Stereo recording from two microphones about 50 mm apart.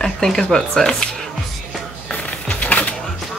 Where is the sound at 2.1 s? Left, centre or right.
Left.